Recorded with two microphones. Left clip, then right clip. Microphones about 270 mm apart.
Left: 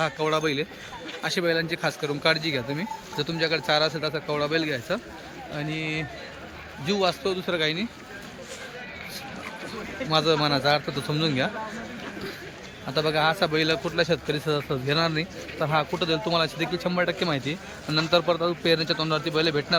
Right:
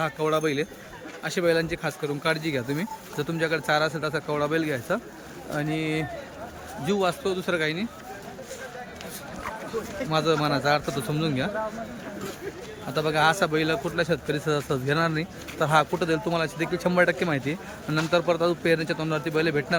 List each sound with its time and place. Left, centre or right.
0.0 s a man's voice: centre
10.1 s a man's voice: centre
12.9 s a man's voice: centre